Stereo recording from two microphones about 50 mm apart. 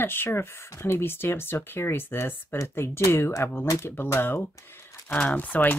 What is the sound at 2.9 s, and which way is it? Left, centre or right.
Speech, left.